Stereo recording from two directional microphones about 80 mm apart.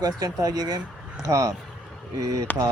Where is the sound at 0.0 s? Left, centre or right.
Right.